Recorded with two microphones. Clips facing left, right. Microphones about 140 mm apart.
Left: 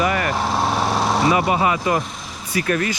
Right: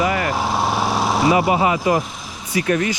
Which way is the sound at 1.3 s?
20° right (ahead or behind).